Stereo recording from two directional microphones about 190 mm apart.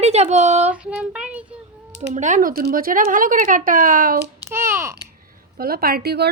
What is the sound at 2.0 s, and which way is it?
Speech, 40° right (ahead or behind).